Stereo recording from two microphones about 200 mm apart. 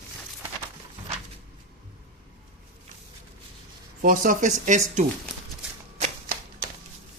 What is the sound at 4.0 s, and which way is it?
Speech, 45° right (ahead or behind).